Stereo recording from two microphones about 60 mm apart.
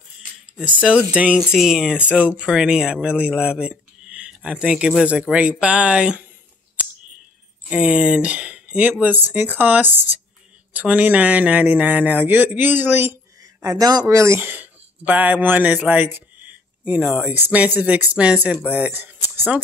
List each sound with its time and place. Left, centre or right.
1.1 s speech: centre
1.5 s speech: centre
7.7 s speech: centre
9.0 s speech: right
13.4 s speech: right
14.4 s speech: right
15.9 s a sound: right
17.3 s speech: right
19.2 s a sound: right